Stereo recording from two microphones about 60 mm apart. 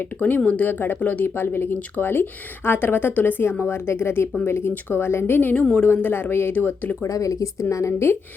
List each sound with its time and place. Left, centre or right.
0.0 s a woman's voice: left
7.1 s a woman's voice: left